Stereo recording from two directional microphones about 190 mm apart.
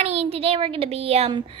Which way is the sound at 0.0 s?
35° right (ahead or behind).